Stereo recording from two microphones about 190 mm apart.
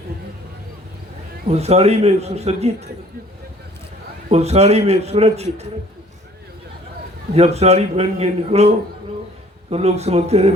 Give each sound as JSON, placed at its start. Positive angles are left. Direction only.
{"t": 1.5, "sound": "a man's voice", "side_deg": -35}
{"t": 4.3, "sound": "a man's voice", "side_deg": -35}
{"t": 7.3, "sound": "a man's voice", "side_deg": -35}